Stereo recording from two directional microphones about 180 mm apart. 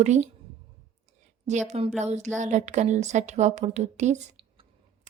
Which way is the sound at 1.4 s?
40° right (ahead or behind).